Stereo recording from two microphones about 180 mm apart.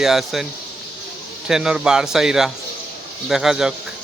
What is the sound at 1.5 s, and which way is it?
Speech, 5° right (ahead or behind).